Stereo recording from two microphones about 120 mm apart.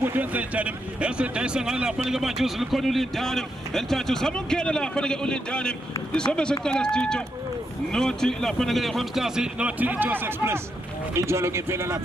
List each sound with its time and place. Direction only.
0.0 s speech: 15° right (ahead or behind)